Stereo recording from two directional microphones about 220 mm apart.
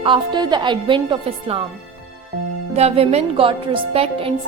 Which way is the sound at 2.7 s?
25° right (ahead or behind).